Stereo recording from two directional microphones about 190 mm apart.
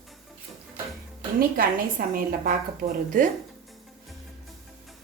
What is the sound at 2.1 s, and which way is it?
A woman's voice, 45° right (ahead or behind).